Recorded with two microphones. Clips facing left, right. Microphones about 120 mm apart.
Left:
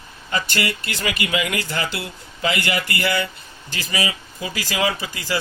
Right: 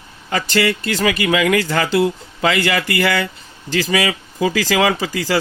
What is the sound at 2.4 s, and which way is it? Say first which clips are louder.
Speech: right 5 dB; 90° right.